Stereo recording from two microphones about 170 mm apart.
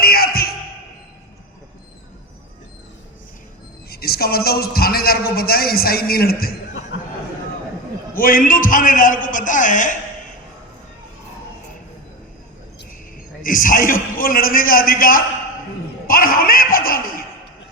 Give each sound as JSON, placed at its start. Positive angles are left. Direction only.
{"t": 0.0, "sound": "music", "side_deg": 65}
{"t": 3.8, "sound": "a man's voice", "side_deg": 65}
{"t": 8.1, "sound": "a man's voice", "side_deg": 55}
{"t": 13.4, "sound": "a man's voice", "side_deg": 55}